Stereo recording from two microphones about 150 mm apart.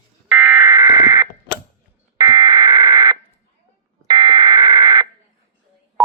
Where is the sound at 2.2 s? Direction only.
25° right (ahead or behind).